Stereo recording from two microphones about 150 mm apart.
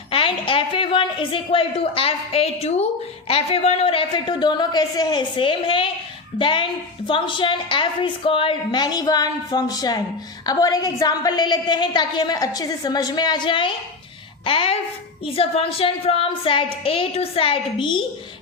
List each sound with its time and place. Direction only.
0.1 s a woman's voice: 35° left (ahead or behind)